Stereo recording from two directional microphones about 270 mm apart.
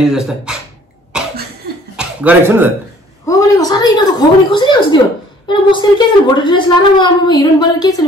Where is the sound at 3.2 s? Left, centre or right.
Centre.